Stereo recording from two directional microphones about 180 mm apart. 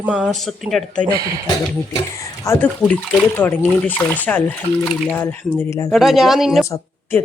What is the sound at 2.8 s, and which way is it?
Speech, 5° left (ahead or behind).